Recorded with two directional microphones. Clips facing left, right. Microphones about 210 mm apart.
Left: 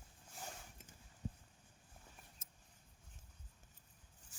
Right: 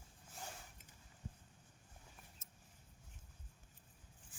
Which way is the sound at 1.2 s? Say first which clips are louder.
Left 6 dB; 35° left (ahead or behind).